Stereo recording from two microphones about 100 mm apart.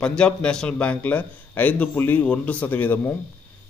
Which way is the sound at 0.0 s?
10° left (ahead or behind).